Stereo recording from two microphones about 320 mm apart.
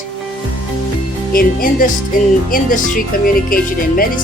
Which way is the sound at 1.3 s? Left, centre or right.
Left.